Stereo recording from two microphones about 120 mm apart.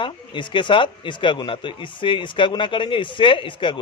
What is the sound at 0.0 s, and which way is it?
A man's voice, 40° left (ahead or behind).